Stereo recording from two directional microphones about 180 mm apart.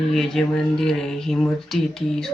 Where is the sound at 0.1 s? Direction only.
Centre (ahead or behind).